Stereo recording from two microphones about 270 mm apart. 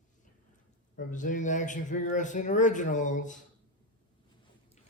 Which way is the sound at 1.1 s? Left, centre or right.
Left.